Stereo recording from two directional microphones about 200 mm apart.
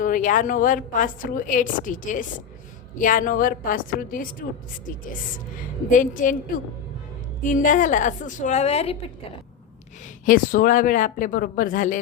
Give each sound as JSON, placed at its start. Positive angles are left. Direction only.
{"t": 0.0, "sound": "a woman's voice", "side_deg": 40}
{"t": 5.5, "sound": "a woman's voice", "side_deg": 40}
{"t": 10.2, "sound": "speech", "side_deg": 45}